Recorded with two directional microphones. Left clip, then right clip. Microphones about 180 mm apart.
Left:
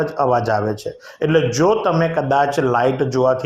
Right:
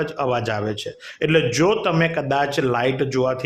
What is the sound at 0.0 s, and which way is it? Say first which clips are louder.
Speech: left 5 dB; 5° right (ahead or behind).